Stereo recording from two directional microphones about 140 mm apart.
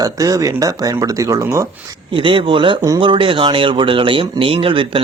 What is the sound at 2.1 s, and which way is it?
Speech, 40° right (ahead or behind).